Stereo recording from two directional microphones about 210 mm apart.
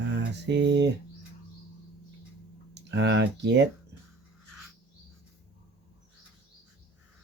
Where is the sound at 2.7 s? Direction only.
55° right (ahead or behind).